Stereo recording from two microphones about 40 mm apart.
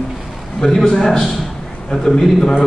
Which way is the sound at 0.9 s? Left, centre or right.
Centre.